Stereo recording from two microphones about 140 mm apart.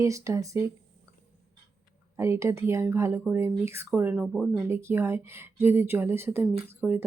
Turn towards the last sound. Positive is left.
turn(degrees=-5)  # may be behind; listen again after turning